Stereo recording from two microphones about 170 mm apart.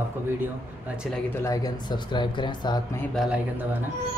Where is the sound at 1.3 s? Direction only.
20° left (ahead or behind).